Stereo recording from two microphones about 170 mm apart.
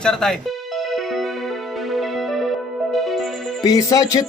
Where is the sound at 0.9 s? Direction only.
Centre (ahead or behind).